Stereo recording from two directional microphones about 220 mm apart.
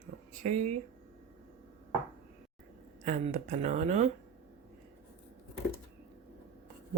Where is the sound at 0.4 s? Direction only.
30° right (ahead or behind).